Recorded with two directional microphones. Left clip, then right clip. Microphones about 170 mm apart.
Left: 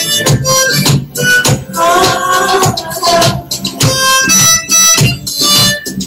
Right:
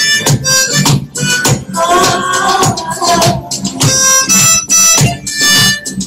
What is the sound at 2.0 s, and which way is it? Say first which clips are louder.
Music: left 1 dB; 45° right (ahead or behind).